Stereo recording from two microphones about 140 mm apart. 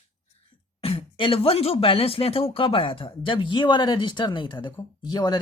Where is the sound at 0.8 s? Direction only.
40° left (ahead or behind).